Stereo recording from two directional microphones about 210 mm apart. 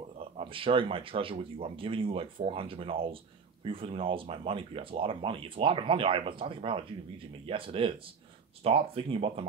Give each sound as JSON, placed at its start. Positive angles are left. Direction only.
{"t": 0.4, "sound": "speech", "side_deg": -25}